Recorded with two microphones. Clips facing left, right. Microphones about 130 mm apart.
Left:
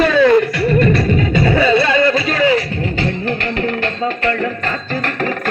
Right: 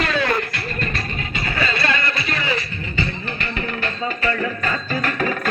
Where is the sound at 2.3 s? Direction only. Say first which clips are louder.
Left 10 dB; 90° left.